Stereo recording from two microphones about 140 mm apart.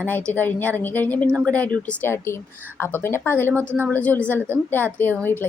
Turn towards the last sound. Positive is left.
turn(degrees=15)  # may be behind; listen again after turning